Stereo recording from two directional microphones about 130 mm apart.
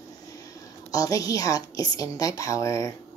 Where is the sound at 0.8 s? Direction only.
25° left (ahead or behind).